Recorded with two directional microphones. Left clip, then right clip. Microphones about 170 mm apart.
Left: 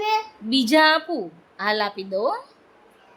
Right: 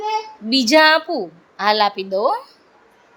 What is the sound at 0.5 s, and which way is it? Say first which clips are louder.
A woman's voice: right 4 dB; 10° right (ahead or behind).